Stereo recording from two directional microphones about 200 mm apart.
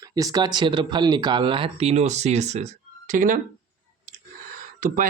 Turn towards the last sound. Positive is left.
turn(degrees=-45)  # may be behind; listen again after turning